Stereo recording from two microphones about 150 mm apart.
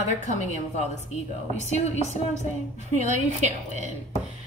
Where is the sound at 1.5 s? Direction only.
50° right (ahead or behind).